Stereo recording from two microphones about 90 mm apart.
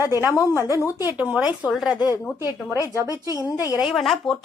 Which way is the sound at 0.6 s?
35° right (ahead or behind).